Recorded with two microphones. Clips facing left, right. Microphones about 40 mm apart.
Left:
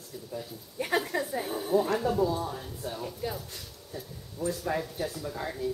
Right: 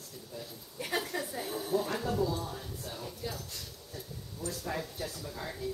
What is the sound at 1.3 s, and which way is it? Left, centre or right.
Speech, left.